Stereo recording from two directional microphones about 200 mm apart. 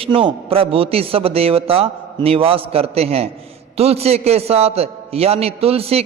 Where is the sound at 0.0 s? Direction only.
25° right (ahead or behind).